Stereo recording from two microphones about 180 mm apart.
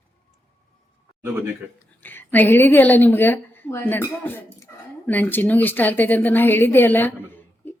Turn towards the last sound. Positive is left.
turn(degrees=10)  # may be behind; listen again after turning